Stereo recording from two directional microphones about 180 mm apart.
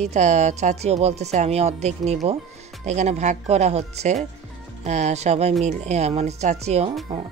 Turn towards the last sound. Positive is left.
turn(degrees=-35)  # may be behind; listen again after turning